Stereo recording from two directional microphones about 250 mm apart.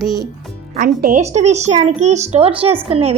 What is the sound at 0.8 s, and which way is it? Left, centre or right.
Speech, right.